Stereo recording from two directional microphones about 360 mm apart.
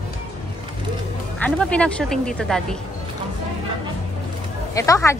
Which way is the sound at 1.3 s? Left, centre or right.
Centre.